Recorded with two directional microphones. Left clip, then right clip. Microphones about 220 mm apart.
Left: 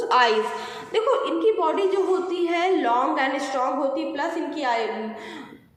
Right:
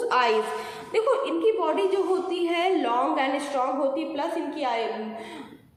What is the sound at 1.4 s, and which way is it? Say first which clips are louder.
A woman's voice: left 2 dB; 5° right (ahead or behind).